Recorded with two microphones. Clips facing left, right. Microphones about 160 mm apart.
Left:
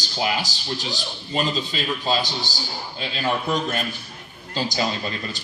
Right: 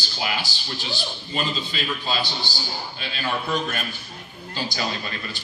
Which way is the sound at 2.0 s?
40° left (ahead or behind).